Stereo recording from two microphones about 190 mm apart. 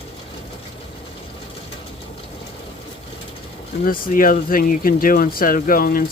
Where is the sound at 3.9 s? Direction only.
50° left (ahead or behind).